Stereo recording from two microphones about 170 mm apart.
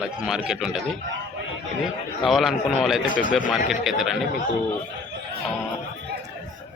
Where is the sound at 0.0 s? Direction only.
5° right (ahead or behind).